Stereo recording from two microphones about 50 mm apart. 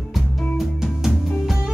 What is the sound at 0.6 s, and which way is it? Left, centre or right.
Music, centre.